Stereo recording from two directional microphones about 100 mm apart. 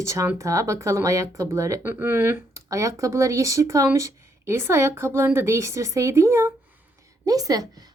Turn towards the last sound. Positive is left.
turn(degrees=-40)  # may be behind; listen again after turning